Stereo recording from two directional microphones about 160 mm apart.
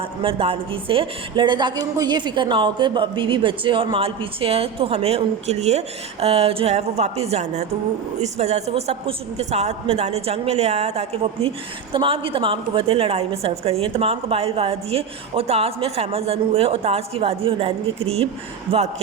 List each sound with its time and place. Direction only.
0.0 s a woman's voice: 35° right (ahead or behind)